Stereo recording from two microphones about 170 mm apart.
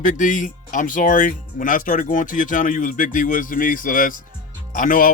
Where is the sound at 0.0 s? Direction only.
50° left (ahead or behind).